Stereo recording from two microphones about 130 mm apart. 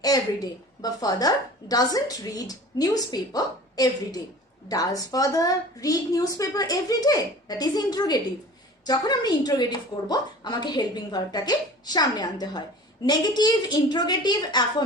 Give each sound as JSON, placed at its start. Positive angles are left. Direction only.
{"t": 0.0, "sound": "a woman's voice", "side_deg": 30}